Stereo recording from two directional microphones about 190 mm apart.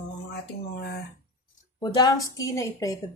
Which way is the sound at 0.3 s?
55° left (ahead or behind).